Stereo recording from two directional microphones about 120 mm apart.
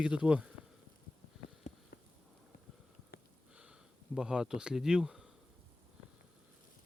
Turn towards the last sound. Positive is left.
turn(degrees=-5)  # may be behind; listen again after turning